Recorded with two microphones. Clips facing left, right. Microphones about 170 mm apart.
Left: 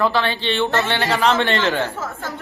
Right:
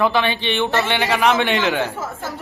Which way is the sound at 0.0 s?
15° right (ahead or behind).